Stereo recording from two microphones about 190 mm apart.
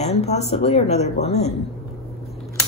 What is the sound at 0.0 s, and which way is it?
Speech, 35° left (ahead or behind).